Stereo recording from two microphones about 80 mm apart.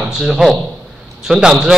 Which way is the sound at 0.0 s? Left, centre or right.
Centre.